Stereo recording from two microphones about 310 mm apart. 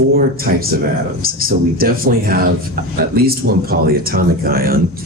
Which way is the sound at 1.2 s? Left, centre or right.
Right.